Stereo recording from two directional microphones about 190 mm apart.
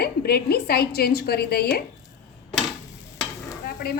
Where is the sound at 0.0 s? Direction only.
55° left (ahead or behind).